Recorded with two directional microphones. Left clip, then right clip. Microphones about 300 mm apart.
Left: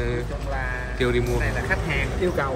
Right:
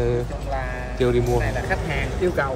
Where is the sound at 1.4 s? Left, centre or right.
Centre.